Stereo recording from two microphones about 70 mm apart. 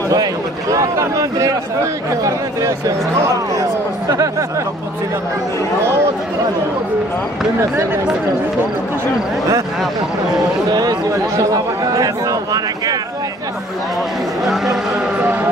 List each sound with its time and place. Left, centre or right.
0.1 s speech: right
4.1 s speech: right
7.7 s speech: right
10.7 s speech: right
11.3 s speech: right
14.4 s speech: centre